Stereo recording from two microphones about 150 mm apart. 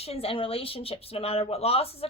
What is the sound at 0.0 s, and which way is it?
A woman's voice, 40° left (ahead or behind).